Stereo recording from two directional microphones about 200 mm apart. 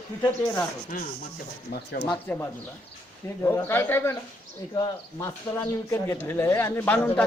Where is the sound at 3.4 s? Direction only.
10° left (ahead or behind).